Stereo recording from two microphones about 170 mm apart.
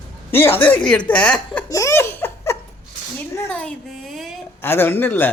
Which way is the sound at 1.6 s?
20° left (ahead or behind).